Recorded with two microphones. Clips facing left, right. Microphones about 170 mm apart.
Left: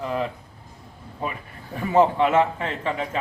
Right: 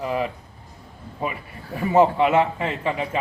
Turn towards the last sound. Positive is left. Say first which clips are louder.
# right 2 dB
turn(degrees=-10)  # may be behind; listen again after turning